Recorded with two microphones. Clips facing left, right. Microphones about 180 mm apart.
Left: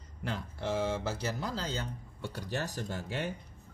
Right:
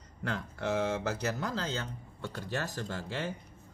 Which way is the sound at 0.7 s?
10° left (ahead or behind).